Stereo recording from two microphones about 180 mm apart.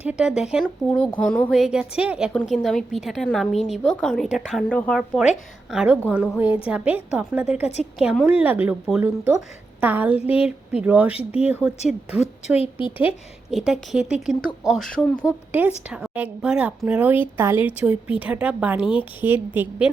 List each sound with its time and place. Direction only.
0.0 s a woman's voice: 5° right (ahead or behind)
10.2 s a woman's voice: 35° left (ahead or behind)
10.7 s a woman's voice: 5° right (ahead or behind)
12.2 s a woman's voice: 35° left (ahead or behind)
13.5 s a woman's voice: centre (ahead or behind)
15.2 s a woman's voice: 10° right (ahead or behind)